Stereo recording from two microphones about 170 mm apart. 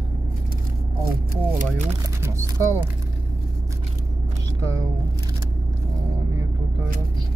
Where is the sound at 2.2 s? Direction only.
15° right (ahead or behind).